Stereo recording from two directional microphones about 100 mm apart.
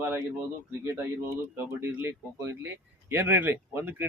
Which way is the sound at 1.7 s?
25° right (ahead or behind).